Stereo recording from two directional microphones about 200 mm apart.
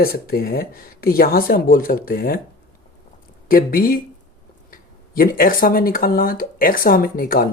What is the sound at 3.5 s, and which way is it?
Speech, 45° left (ahead or behind).